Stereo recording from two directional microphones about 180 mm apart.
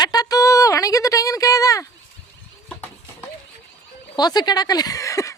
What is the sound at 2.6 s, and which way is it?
Horse, 10° left (ahead or behind).